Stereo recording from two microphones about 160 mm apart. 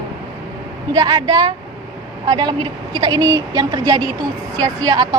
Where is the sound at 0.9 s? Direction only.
25° right (ahead or behind).